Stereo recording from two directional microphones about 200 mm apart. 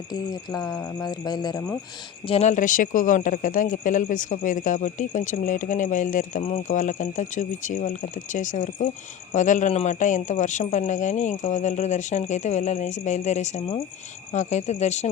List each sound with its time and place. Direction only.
0.1 s speech: 20° left (ahead or behind)
2.2 s speech: 30° left (ahead or behind)